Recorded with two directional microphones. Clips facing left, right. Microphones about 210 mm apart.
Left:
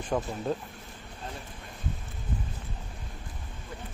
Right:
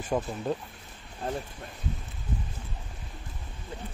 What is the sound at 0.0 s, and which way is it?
Speech, 5° right (ahead or behind).